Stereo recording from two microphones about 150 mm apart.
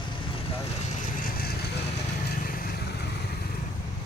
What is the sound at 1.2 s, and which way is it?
Vehicle, 80° left.